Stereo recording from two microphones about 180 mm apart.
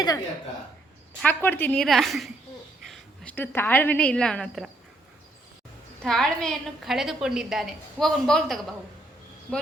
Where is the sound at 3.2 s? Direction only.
10° left (ahead or behind).